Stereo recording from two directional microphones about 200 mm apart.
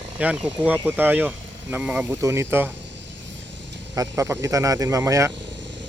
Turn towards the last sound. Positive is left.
turn(degrees=-15)  # may be behind; listen again after turning